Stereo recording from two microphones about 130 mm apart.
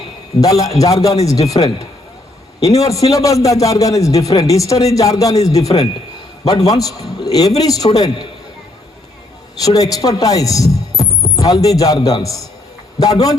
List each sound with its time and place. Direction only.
0.3 s a man's voice: 25° left (ahead or behind)
9.6 s a man's voice: 30° left (ahead or behind)